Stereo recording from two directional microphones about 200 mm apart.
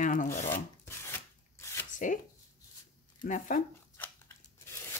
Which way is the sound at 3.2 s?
40° left (ahead or behind).